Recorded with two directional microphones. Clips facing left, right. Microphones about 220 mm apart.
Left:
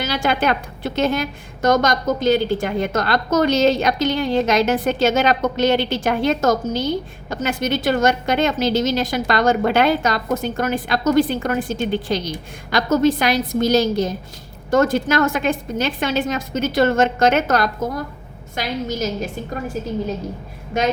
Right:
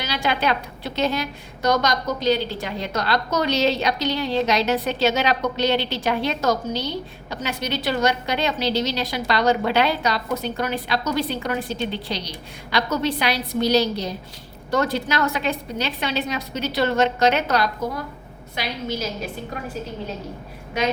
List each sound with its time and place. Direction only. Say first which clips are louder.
0.0 s a woman's voice: left 4 dB; 50° left (ahead or behind)